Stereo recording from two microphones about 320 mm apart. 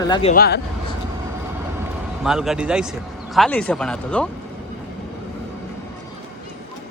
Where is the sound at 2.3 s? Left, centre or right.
Centre.